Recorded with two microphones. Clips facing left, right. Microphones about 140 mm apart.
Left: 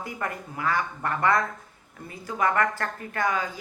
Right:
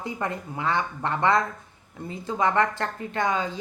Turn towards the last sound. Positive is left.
turn(degrees=-25)  # may be behind; listen again after turning